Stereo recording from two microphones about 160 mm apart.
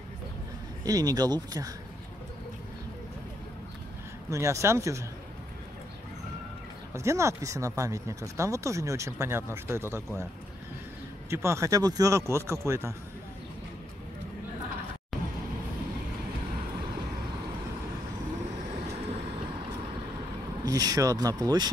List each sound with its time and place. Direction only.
0.8 s speech: 25° right (ahead or behind)
4.3 s speech: 20° right (ahead or behind)
6.9 s speech: 15° right (ahead or behind)
11.2 s speech: 15° right (ahead or behind)
20.6 s speech: 20° right (ahead or behind)